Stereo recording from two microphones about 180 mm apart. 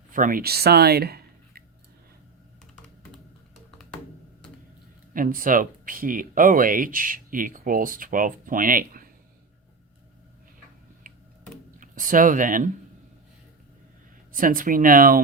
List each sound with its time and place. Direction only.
0.1 s speech: 50° right (ahead or behind)
5.1 s speech: 50° right (ahead or behind)
11.1 s tick-tock: 50° right (ahead or behind)
11.8 s speech: 50° right (ahead or behind)
14.3 s speech: 50° right (ahead or behind)